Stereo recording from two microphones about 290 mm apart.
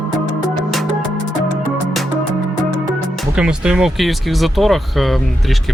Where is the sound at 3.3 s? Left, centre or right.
Centre.